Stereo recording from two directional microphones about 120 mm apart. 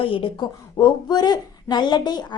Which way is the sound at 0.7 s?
35° left (ahead or behind).